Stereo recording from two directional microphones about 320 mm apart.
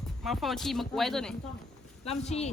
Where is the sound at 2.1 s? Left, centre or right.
Centre.